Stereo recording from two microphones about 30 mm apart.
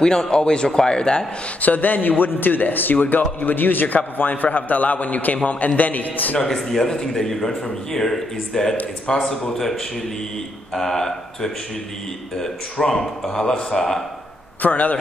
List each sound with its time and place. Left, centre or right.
0.0 s a man's voice: left
1.6 s a man's voice: left
5.8 s a man's voice: left
6.4 s a man's voice: centre
14.6 s a man's voice: left